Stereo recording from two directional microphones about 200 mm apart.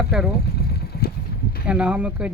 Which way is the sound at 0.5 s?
50° left (ahead or behind).